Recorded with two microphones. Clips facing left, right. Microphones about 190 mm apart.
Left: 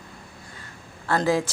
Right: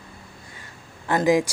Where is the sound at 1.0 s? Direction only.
15° right (ahead or behind).